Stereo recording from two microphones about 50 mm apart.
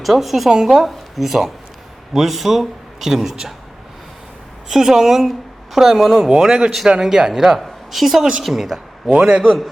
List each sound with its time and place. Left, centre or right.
0.0 s a man's voice: centre
4.7 s a woman's voice: centre
9.0 s a man's voice: centre